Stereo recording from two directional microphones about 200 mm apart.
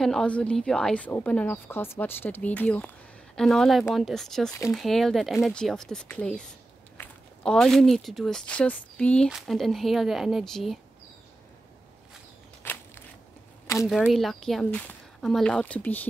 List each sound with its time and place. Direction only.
0.0 s a woman's voice: centre (ahead or behind)
13.8 s speech: centre (ahead or behind)